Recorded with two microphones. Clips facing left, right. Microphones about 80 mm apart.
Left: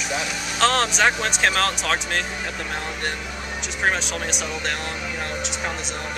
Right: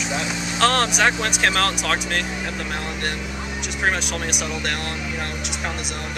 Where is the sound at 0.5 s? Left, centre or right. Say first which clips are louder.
Right 1 dB; centre.